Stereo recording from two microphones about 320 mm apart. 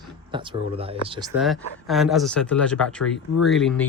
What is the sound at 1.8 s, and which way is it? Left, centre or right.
Speech, centre.